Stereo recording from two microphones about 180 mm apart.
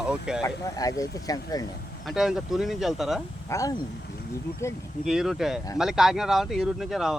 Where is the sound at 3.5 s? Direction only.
15° left (ahead or behind).